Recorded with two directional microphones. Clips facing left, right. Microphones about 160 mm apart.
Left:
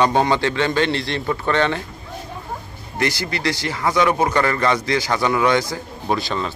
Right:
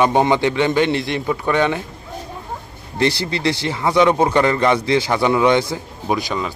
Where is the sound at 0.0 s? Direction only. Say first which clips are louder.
Right 2 dB; 15° right (ahead or behind).